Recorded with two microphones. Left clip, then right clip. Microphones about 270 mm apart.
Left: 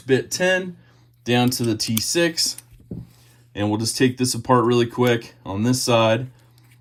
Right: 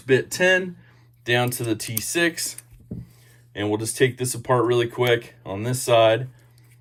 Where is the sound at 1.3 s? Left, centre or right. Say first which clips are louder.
Left 2 dB; centre.